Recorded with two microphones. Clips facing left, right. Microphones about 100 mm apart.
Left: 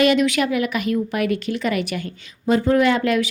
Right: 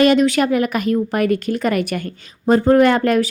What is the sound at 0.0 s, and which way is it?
Speech, 35° right (ahead or behind).